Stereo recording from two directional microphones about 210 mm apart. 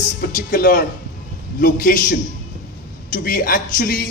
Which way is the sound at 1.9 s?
45° left (ahead or behind).